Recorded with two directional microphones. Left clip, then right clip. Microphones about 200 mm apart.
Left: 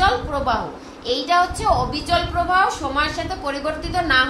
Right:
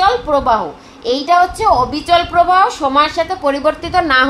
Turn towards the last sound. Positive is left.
turn(degrees=-50)  # may be behind; listen again after turning